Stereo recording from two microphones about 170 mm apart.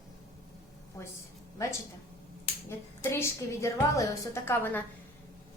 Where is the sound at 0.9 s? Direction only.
15° left (ahead or behind).